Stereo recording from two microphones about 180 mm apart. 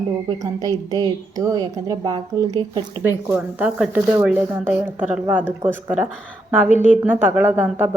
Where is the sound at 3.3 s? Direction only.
10° right (ahead or behind).